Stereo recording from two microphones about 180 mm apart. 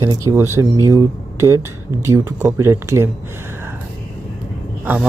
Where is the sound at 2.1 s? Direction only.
15° right (ahead or behind).